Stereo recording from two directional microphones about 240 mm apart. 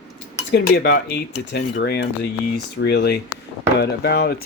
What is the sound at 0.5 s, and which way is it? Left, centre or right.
Speech, left.